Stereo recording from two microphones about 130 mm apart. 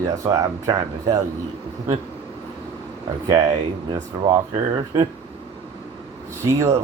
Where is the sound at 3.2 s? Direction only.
35° right (ahead or behind).